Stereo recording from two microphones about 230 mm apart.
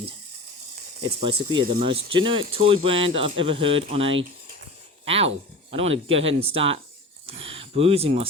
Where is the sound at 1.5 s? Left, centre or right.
Right.